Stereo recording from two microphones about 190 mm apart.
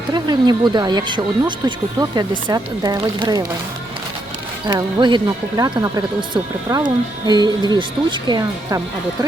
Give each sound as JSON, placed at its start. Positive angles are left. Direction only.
{"t": 0.1, "sound": "speech", "side_deg": -25}
{"t": 4.6, "sound": "speech", "side_deg": -20}